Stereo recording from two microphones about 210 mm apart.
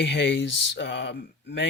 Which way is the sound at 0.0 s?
60° left (ahead or behind).